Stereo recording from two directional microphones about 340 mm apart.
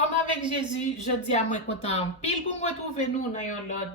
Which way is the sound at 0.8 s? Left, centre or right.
Centre.